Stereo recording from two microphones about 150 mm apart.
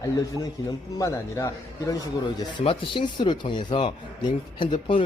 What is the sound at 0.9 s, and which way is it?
A man's voice, 20° left (ahead or behind).